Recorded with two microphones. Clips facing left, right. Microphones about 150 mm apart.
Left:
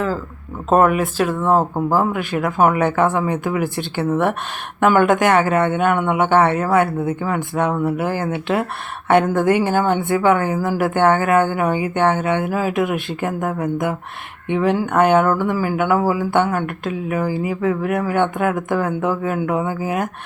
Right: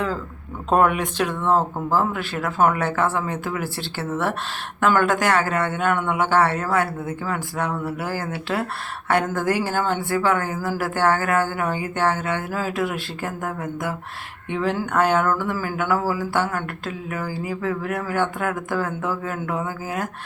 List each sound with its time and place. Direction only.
0.7 s speech: 5° left (ahead or behind); by 20.1 s 20° left (ahead or behind)